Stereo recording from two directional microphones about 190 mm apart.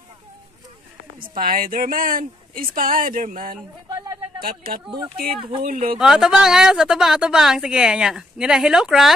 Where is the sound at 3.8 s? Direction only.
15° right (ahead or behind).